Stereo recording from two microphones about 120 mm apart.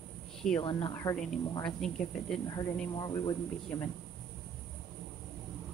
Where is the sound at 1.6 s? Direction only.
5° left (ahead or behind).